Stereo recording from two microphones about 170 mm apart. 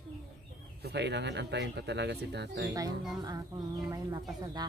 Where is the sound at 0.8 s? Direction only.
90° right.